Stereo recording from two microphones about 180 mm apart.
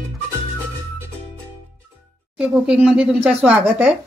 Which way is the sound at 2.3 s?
5° right (ahead or behind).